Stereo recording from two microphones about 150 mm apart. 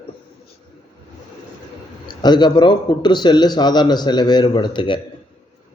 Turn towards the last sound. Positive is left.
turn(degrees=30)  # may be behind; listen again after turning